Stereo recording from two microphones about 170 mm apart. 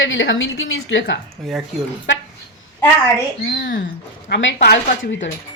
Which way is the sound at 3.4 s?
65° left (ahead or behind).